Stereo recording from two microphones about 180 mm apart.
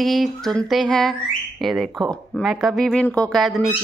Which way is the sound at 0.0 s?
Centre (ahead or behind).